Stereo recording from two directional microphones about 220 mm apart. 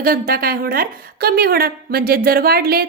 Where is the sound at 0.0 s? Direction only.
40° right (ahead or behind).